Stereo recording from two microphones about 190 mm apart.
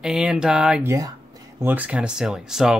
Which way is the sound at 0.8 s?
15° right (ahead or behind).